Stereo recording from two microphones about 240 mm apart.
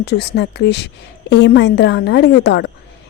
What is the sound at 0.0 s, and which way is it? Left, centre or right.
Speech, left.